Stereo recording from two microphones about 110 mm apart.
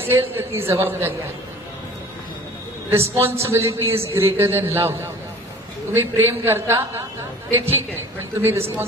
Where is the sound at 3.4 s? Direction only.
25° right (ahead or behind).